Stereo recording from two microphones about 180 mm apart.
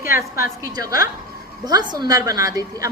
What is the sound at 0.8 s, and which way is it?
A woman's voice, 20° right (ahead or behind).